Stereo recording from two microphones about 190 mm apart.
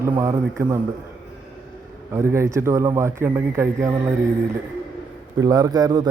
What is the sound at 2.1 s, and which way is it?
A man's voice, 15° right (ahead or behind).